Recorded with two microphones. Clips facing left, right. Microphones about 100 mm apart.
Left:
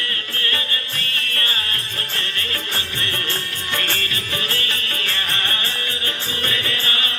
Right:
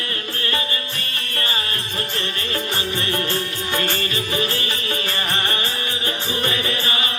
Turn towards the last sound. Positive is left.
turn(degrees=-20)  # may be behind; listen again after turning